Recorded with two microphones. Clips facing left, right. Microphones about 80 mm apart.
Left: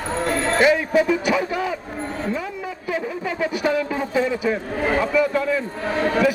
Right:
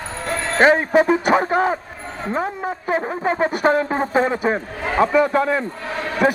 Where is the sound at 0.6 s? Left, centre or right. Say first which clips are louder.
Right 4 dB; right.